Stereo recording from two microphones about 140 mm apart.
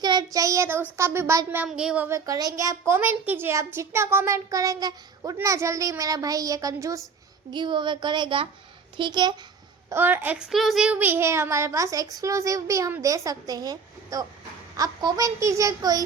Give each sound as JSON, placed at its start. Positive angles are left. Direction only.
{"t": 0.0, "sound": "child singing", "side_deg": -30}
{"t": 0.3, "sound": "speech", "side_deg": -20}
{"t": 2.0, "sound": "a child's voice", "side_deg": -25}
{"t": 7.5, "sound": "a woman's voice", "side_deg": -35}
{"t": 9.9, "sound": "a child's voice", "side_deg": -15}